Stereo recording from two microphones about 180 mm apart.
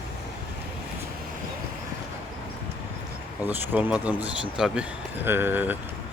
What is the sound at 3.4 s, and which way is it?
A man's voice, 10° right (ahead or behind).